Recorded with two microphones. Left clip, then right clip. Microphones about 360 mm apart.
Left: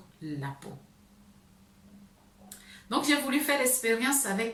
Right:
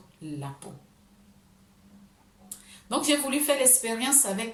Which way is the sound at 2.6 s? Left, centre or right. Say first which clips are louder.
Right 1 dB; centre.